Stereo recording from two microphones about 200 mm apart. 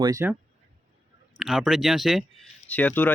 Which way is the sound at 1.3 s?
Centre (ahead or behind).